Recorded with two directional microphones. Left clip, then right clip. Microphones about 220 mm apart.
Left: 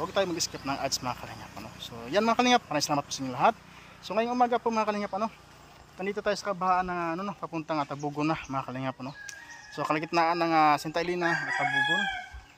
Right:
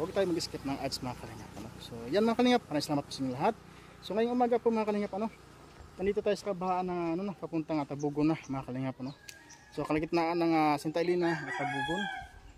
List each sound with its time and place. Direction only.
0.0 s speech: 5° right (ahead or behind)
11.2 s chicken: 20° left (ahead or behind)